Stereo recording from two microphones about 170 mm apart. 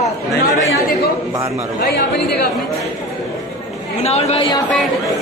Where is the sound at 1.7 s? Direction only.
75° left (ahead or behind).